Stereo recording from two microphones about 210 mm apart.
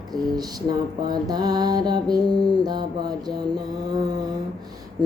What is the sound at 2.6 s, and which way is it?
Music, 20° right (ahead or behind).